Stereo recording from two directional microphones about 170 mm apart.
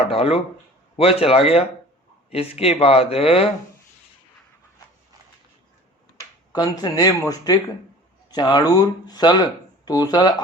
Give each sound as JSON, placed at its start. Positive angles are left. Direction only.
{"t": 0.1, "sound": "speech", "side_deg": 35}
{"t": 6.5, "sound": "speech", "side_deg": 20}